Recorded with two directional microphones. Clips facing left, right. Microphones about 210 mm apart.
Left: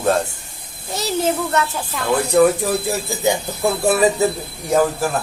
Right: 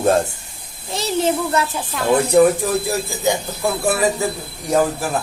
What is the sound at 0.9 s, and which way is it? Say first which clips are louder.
Speech: right 1 dB; 25° right (ahead or behind).